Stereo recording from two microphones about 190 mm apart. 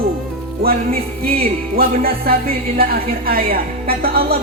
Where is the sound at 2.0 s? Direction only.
50° right (ahead or behind).